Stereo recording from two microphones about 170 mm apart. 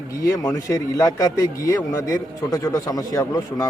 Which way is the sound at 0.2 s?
20° left (ahead or behind).